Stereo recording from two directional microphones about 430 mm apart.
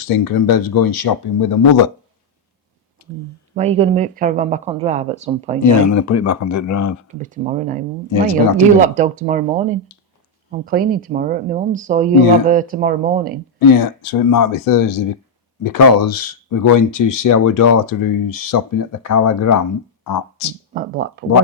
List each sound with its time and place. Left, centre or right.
0.3 s speech: left
3.5 s speech: centre
5.6 s speech: left
7.1 s speech: centre
13.7 s speech: left
20.1 s speech: left
20.7 s speech: right